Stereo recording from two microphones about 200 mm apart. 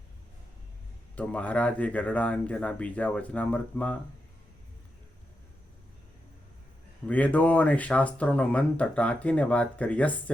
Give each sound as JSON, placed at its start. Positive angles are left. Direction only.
{"t": 1.1, "sound": "speech", "side_deg": 5}
{"t": 7.1, "sound": "speech", "side_deg": 5}